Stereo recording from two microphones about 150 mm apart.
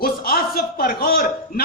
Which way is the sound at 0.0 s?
85° left.